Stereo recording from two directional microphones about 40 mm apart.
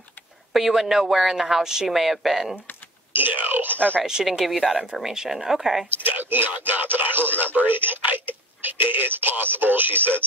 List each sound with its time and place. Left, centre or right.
0.5 s a woman's voice: centre
3.1 s speech: right
4.0 s a woman's voice: centre
4.5 s a woman's voice: centre
5.9 s speech: right